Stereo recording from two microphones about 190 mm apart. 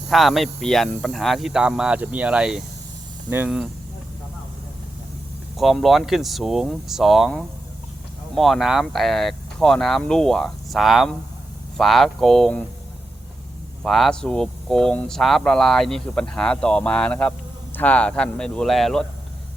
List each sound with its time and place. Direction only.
0.1 s speech: centre (ahead or behind)
5.5 s speech: centre (ahead or behind)
13.8 s speech: centre (ahead or behind)